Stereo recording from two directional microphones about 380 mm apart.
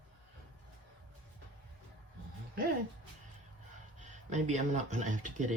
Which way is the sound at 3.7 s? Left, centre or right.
Centre.